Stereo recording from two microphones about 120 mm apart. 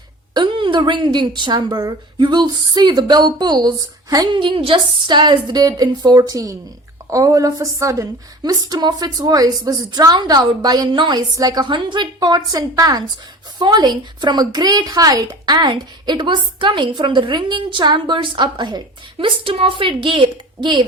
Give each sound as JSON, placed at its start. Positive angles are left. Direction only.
{"t": 0.3, "sound": "a woman's voice", "side_deg": -45}
{"t": 19.2, "sound": "a woman's voice", "side_deg": -50}